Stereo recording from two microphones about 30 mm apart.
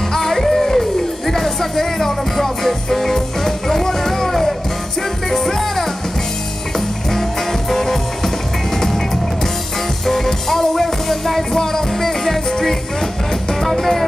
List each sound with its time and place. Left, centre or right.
0.1 s music: centre
7.1 s music: centre
11.5 s music: centre